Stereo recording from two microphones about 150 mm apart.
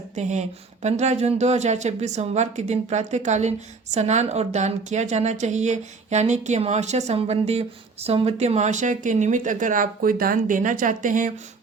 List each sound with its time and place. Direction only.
0.2 s speech: 50° right (ahead or behind)